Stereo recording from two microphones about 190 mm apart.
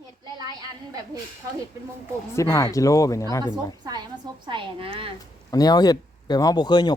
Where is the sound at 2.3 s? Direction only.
15° left (ahead or behind).